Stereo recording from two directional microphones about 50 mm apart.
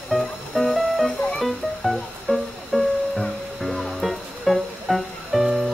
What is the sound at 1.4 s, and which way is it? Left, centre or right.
Music, centre.